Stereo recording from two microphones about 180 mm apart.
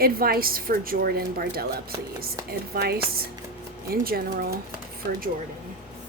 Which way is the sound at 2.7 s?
60° right (ahead or behind).